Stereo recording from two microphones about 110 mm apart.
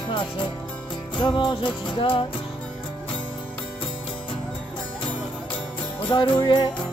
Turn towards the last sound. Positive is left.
turn(degrees=45)  # may be behind; listen again after turning